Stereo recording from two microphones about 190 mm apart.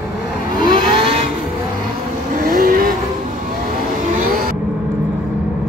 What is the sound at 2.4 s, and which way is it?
Vehicle, 50° right (ahead or behind).